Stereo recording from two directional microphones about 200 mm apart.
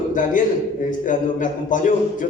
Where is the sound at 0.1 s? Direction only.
40° left (ahead or behind).